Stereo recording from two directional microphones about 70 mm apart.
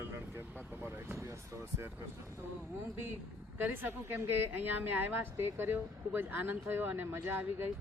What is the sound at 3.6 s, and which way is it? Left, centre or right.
A woman's voice, right.